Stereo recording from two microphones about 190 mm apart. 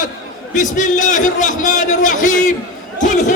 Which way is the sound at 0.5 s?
40° left (ahead or behind).